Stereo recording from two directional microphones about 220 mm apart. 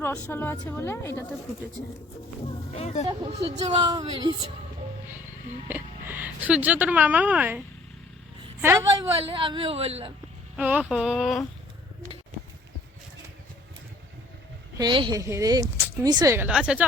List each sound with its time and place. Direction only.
0.0 s a woman's voice: 10° left (ahead or behind)
2.7 s speech: 30° left (ahead or behind)
3.1 s a woman's voice: 25° right (ahead or behind)
5.6 s speech: 10° right (ahead or behind)
8.6 s speech: 10° right (ahead or behind)
9.3 s a woman's voice: 25° right (ahead or behind)
10.6 s speech: 5° right (ahead or behind)
14.8 s speech: 20° right (ahead or behind); by 16.8 s 5° right (ahead or behind)